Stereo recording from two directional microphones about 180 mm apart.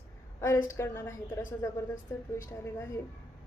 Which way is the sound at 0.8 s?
15° left (ahead or behind).